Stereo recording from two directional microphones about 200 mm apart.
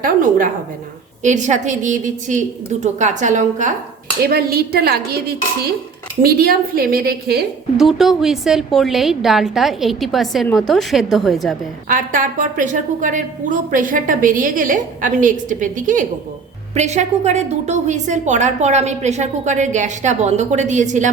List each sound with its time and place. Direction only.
0.0 s a woman's voice: 45° right (ahead or behind)
4.2 s speech: 50° right (ahead or behind)
7.8 s a woman's voice: centre (ahead or behind)
11.9 s a woman's voice: 40° right (ahead or behind)